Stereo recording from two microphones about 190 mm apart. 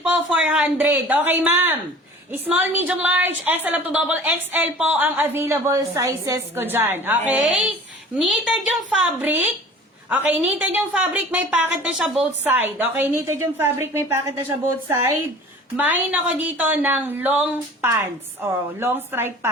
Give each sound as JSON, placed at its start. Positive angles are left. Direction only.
{"t": 0.0, "sound": "a woman's voice", "side_deg": -5}